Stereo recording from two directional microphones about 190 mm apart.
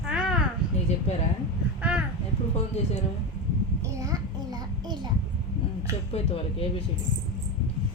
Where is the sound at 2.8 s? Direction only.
35° left (ahead or behind).